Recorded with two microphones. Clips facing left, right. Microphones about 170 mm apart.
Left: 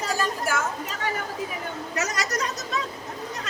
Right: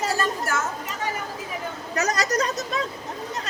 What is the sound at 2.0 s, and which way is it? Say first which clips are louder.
Speech: right 5 dB; 35° right (ahead or behind).